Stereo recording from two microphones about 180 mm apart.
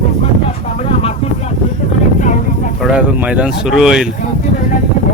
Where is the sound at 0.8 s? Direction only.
35° left (ahead or behind).